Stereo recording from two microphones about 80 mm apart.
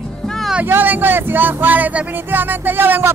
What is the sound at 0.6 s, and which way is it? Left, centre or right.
Speech, right.